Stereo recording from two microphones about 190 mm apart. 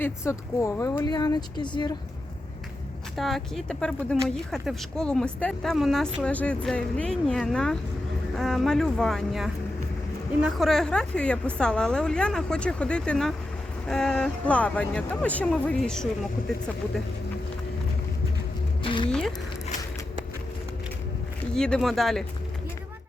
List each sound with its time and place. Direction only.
0.0 s speech: 15° left (ahead or behind)
3.2 s a woman's voice: centre (ahead or behind)
18.8 s music: 25° left (ahead or behind)
21.5 s a woman's voice: 5° left (ahead or behind)